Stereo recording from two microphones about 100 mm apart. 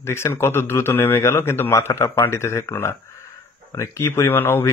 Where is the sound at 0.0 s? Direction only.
25° left (ahead or behind).